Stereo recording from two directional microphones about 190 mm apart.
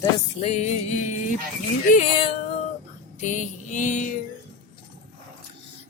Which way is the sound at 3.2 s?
40° left (ahead or behind).